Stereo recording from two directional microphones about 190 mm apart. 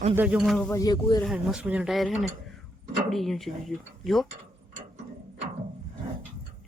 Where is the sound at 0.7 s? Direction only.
20° left (ahead or behind).